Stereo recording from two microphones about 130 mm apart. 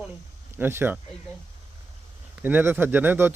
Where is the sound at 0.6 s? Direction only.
15° right (ahead or behind).